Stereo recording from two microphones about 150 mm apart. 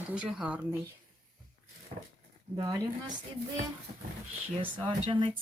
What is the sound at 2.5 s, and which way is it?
Speech, 30° right (ahead or behind).